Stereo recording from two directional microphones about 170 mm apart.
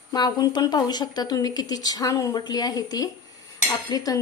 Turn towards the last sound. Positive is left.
turn(degrees=20)  # may be behind; listen again after turning